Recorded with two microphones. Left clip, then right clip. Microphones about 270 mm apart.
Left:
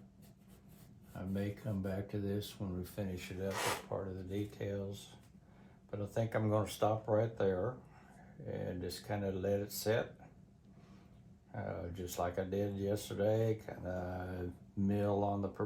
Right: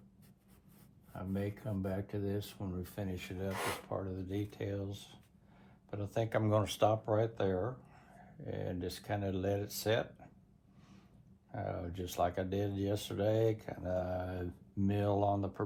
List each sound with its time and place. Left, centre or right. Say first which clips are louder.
1.3 s speech: right 1 dB; centre
2.6 s speech: even; right
6.1 s speech: right 2 dB; right
11.5 s speech: right 2 dB; right